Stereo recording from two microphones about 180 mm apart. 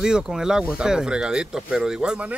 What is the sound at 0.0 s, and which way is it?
Speech, 5° right (ahead or behind).